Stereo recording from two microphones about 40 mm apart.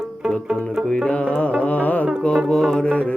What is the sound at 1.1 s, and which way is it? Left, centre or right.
Carnatic music, left.